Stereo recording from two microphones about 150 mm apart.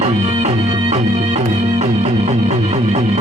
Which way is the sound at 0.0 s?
45° right (ahead or behind).